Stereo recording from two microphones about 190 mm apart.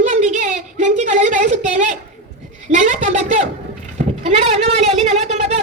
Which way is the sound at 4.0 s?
35° right (ahead or behind).